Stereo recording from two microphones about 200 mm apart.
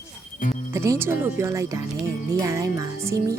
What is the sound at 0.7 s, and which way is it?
Speech, 15° right (ahead or behind).